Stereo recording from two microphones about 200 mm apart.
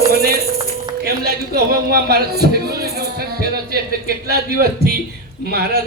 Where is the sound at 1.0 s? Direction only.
50° right (ahead or behind).